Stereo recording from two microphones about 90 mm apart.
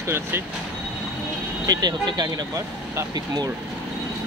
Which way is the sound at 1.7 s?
50° right (ahead or behind).